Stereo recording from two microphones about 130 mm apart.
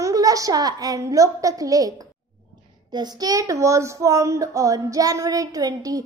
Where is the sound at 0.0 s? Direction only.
25° right (ahead or behind).